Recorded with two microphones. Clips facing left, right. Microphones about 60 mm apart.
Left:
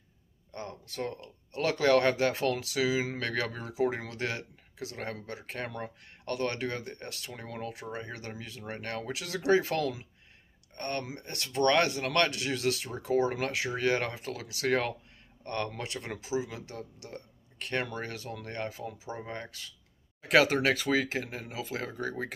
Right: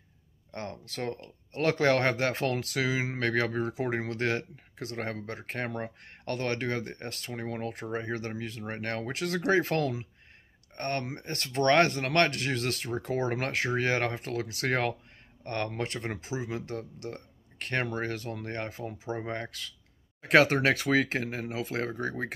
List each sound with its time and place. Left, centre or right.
0.5 s speech: right
20.2 s speech: right